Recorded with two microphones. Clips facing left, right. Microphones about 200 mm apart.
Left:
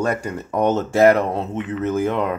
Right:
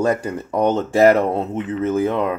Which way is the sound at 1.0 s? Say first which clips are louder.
Right 1 dB; 30° right (ahead or behind).